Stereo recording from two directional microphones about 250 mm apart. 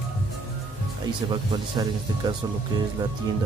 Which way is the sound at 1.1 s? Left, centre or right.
Centre.